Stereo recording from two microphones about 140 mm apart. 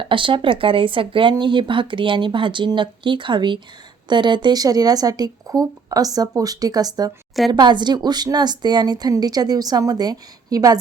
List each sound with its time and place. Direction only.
0.0 s a woman's voice: 40° right (ahead or behind)